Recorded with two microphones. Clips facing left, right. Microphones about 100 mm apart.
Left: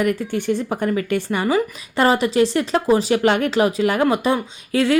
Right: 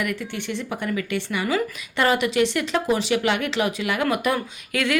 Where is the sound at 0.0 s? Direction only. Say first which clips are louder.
Left 7 dB; 40° left (ahead or behind).